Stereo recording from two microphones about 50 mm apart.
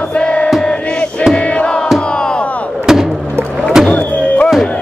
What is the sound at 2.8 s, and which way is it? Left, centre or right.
Music, centre.